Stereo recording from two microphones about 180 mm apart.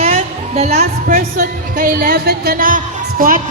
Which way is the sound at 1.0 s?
50° right (ahead or behind).